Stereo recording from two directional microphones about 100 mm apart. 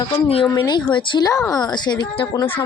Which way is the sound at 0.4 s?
40° left (ahead or behind).